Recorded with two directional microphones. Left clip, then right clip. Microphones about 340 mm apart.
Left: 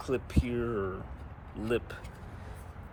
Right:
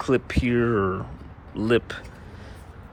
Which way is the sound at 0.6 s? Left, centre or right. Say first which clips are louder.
Right 10 dB; right.